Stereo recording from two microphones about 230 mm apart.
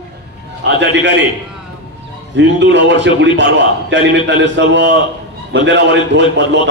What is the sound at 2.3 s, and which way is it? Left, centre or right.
A man's voice, right.